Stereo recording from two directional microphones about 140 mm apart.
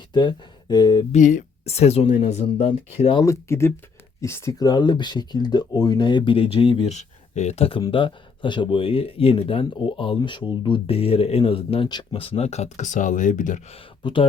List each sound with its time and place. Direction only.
0.1 s speech: 30° left (ahead or behind)
1.1 s speech: 65° left (ahead or behind)
1.6 s speech: 50° left (ahead or behind)
3.2 s speech: 20° left (ahead or behind); by 6.9 s 40° left (ahead or behind)
6.9 s speech: 55° left (ahead or behind)
13.7 s speech: 40° left (ahead or behind)